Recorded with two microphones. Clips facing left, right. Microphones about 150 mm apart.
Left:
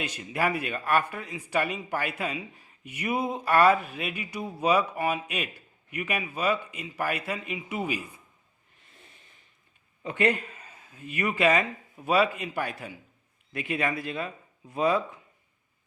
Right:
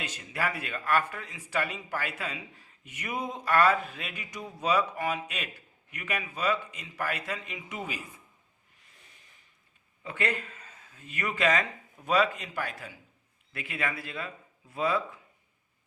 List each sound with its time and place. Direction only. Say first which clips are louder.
0.0 s speech: left 5 dB; 10° left (ahead or behind)
10.0 s a man's voice: left 6 dB; 20° left (ahead or behind)